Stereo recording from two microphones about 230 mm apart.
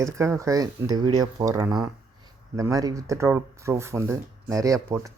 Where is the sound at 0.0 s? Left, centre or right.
Centre.